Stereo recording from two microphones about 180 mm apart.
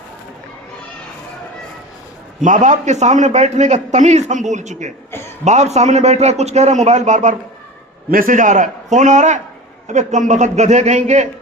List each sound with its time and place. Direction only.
2.4 s a man's voice: 45° right (ahead or behind)